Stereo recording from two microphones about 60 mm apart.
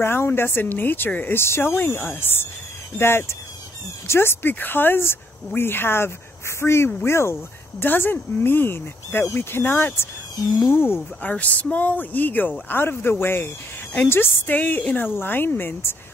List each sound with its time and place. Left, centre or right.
0.0 s speech: left
1.3 s speech: left
1.8 s speech: left
7.8 s speech: left
11.2 s speech: left